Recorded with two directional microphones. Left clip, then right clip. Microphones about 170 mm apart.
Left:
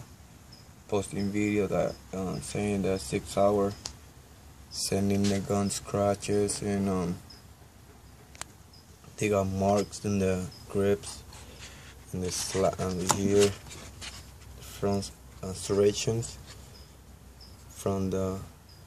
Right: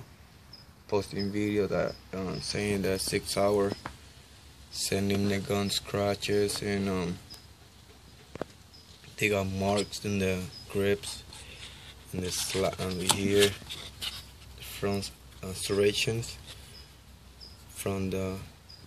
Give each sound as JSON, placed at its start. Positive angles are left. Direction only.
{"t": 1.1, "sound": "speech", "side_deg": 0}
{"t": 3.4, "sound": "speech", "side_deg": -10}
{"t": 4.7, "sound": "speech", "side_deg": 5}
{"t": 9.1, "sound": "speech", "side_deg": 5}
{"t": 11.6, "sound": "a sound", "side_deg": 5}
{"t": 12.4, "sound": "speech", "side_deg": 5}
{"t": 13.7, "sound": "writing", "side_deg": 25}
{"t": 14.8, "sound": "speech", "side_deg": 0}
{"t": 17.8, "sound": "speech", "side_deg": 0}